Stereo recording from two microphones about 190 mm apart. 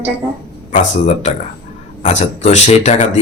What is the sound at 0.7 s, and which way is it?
Speech, 40° left (ahead or behind).